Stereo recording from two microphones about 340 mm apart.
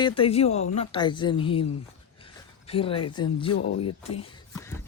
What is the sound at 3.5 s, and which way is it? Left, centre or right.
Speech, left.